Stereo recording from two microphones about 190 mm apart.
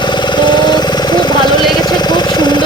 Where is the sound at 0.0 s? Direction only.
25° left (ahead or behind).